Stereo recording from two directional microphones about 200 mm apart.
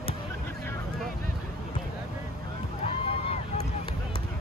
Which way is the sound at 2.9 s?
30° left (ahead or behind).